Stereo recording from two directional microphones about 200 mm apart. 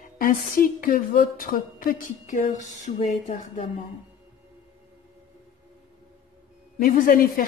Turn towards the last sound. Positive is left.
turn(degrees=45)  # may be behind; listen again after turning